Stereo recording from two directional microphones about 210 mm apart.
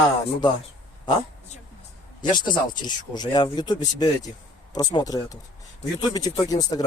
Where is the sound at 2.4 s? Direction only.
20° left (ahead or behind).